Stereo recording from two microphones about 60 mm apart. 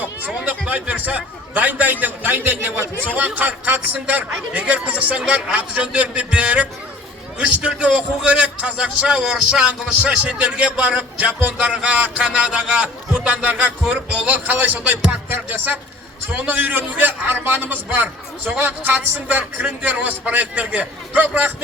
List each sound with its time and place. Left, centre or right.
0.0 s a man's voice: right